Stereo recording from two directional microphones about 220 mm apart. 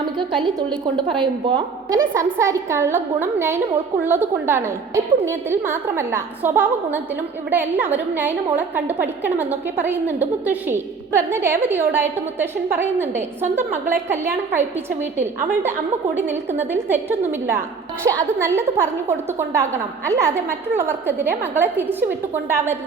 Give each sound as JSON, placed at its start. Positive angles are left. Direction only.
{"t": 0.2, "sound": "a woman's voice", "side_deg": -20}